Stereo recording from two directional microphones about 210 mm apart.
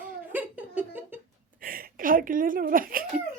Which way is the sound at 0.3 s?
10° right (ahead or behind).